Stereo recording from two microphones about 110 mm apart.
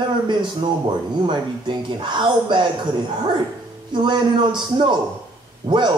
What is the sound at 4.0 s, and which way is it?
Speech, 45° right (ahead or behind).